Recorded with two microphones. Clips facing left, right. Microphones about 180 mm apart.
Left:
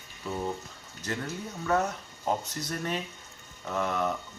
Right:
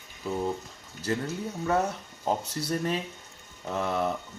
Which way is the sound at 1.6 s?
30° right (ahead or behind).